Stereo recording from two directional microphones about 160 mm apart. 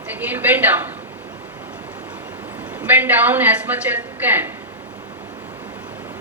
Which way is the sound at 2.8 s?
10° right (ahead or behind).